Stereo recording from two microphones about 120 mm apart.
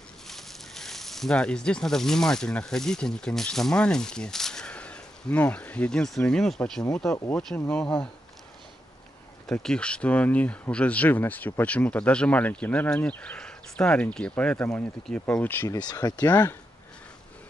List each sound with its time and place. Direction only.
0.3 s speech: centre (ahead or behind)
7.1 s speech: 25° left (ahead or behind)
7.3 s speech: 10° left (ahead or behind)
9.5 s speech: 5° left (ahead or behind)
15.7 s speech: 35° left (ahead or behind)
16.3 s speech: 20° left (ahead or behind)